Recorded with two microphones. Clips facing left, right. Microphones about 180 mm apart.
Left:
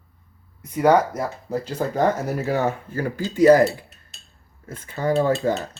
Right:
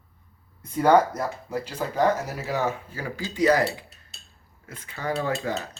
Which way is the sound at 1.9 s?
50° left (ahead or behind).